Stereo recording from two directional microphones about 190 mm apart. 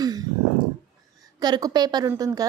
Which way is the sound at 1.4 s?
20° right (ahead or behind).